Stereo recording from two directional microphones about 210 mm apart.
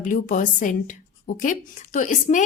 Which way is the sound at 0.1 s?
40° left (ahead or behind).